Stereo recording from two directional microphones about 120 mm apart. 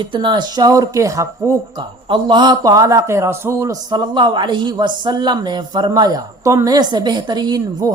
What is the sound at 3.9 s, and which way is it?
A woman's voice, 40° right (ahead or behind).